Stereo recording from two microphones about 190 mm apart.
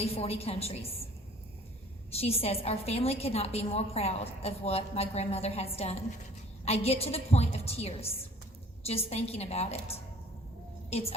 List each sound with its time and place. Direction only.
0.0 s a woman's voice: 35° left (ahead or behind)
2.1 s a woman's voice: 30° left (ahead or behind)